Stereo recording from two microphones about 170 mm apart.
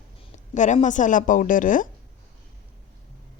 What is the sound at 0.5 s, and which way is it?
Speech, 45° left (ahead or behind).